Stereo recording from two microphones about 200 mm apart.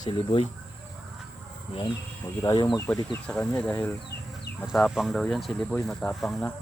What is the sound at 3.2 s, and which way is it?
Speech, 5° left (ahead or behind).